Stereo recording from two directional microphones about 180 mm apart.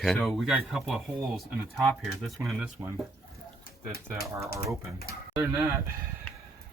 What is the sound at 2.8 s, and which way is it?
Speech, 25° right (ahead or behind).